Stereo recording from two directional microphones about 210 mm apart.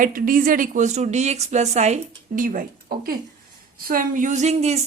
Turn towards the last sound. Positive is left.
turn(degrees=-30)  # may be behind; listen again after turning